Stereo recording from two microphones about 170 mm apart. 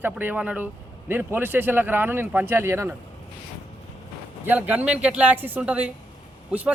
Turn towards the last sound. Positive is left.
turn(degrees=-5)  # may be behind; listen again after turning